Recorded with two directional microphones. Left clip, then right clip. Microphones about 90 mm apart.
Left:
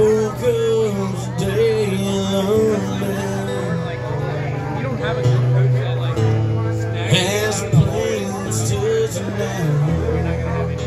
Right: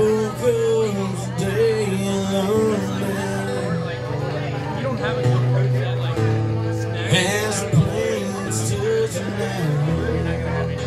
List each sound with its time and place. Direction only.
0.0 s music: 25° right (ahead or behind)
7.1 s music: 25° right (ahead or behind)